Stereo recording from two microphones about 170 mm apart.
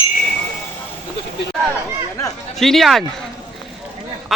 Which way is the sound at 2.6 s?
Centre (ahead or behind).